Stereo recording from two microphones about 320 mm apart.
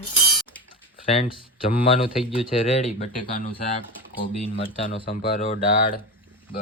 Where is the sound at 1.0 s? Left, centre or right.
Centre.